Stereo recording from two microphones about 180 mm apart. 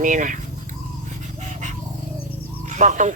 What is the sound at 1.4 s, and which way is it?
Dog, 45° right (ahead or behind).